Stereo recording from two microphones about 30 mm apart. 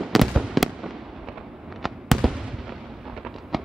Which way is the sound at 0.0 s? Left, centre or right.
Centre.